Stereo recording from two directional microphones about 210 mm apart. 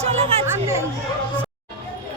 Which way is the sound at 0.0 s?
30° right (ahead or behind).